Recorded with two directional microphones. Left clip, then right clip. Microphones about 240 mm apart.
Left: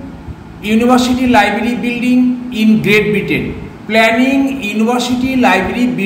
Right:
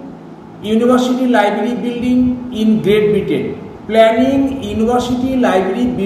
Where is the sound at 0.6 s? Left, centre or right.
Left.